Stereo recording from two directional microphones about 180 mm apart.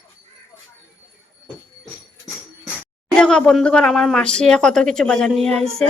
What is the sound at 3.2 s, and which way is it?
Speech, 5° left (ahead or behind).